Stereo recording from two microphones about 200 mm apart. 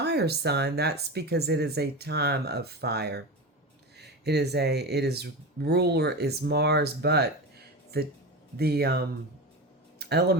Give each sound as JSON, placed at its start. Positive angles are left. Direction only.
{"t": 0.0, "sound": "speech", "side_deg": -55}